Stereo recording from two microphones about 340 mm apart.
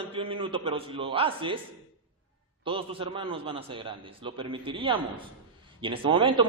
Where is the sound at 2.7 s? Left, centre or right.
Centre.